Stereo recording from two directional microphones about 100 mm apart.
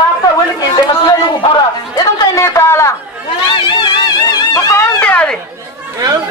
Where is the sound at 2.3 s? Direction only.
30° left (ahead or behind).